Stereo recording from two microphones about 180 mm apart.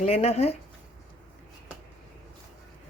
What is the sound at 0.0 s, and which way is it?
Speech, 35° left (ahead or behind).